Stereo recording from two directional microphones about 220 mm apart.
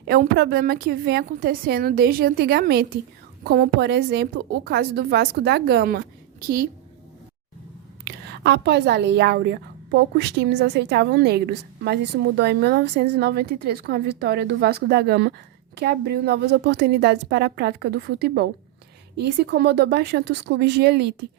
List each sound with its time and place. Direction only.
0.1 s a woman's voice: 45° right (ahead or behind)
8.0 s a woman's voice: 50° right (ahead or behind)